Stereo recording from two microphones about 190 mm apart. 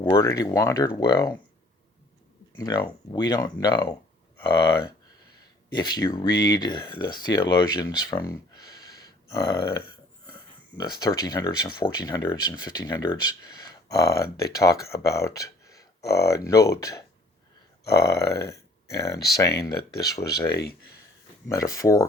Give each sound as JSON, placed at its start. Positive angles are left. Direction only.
{"t": 0.0, "sound": "speech", "side_deg": 15}
{"t": 2.6, "sound": "speech", "side_deg": 20}
{"t": 5.7, "sound": "speech", "side_deg": 20}
{"t": 19.5, "sound": "speech", "side_deg": 60}
{"t": 20.0, "sound": "speech", "side_deg": 20}
{"t": 20.5, "sound": "speech", "side_deg": 60}
{"t": 21.5, "sound": "speech", "side_deg": 15}